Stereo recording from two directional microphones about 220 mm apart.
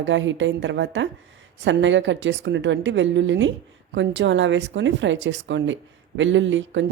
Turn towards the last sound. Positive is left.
turn(degrees=-55)  # may be behind; listen again after turning